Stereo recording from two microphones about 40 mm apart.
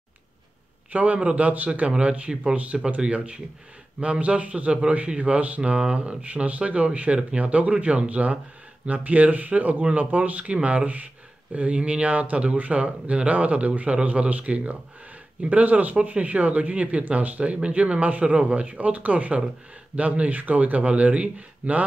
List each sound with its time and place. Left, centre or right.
0.9 s speech: right
1.7 s speech: right
4.0 s speech: right
5.6 s speech: right